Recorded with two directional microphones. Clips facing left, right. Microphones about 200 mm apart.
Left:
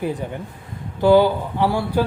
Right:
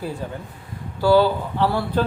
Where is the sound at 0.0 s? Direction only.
15° left (ahead or behind).